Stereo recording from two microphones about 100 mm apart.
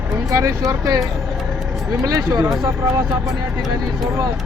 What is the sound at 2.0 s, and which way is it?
Speech, 40° right (ahead or behind).